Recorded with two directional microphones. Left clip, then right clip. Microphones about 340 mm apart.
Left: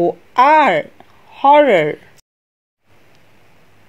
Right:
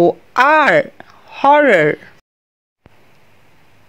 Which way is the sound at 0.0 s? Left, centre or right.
Right.